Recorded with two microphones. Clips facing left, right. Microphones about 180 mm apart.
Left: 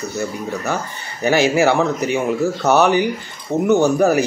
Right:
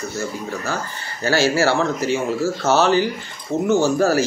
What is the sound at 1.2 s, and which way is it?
Speech, 20° left (ahead or behind).